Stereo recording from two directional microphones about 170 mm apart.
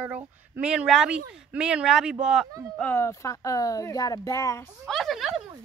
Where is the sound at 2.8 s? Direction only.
10° left (ahead or behind).